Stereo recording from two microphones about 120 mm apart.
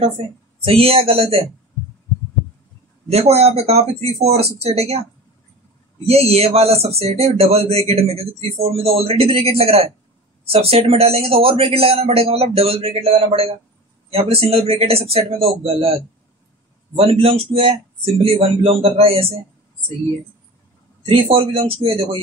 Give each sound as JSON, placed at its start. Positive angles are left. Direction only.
{"t": 0.7, "sound": "a man's voice", "side_deg": -55}
{"t": 3.1, "sound": "speech", "side_deg": -60}
{"t": 6.2, "sound": "speech", "side_deg": -60}
{"t": 16.9, "sound": "a man's voice", "side_deg": -55}
{"t": 21.0, "sound": "a man's voice", "side_deg": -50}